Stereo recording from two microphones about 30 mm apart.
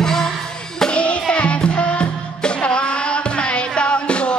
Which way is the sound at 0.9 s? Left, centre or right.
Left.